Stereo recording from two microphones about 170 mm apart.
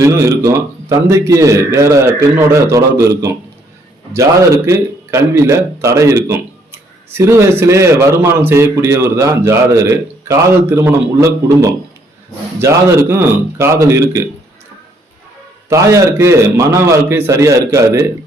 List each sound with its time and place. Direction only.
0.0 s a man's voice: 20° right (ahead or behind)
15.7 s a man's voice: 15° right (ahead or behind)